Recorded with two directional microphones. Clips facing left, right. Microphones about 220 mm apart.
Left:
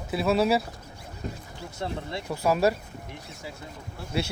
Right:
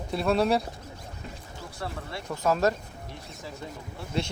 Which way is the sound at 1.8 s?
20° left (ahead or behind).